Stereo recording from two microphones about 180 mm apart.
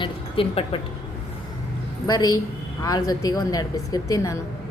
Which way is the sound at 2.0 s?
20° left (ahead or behind).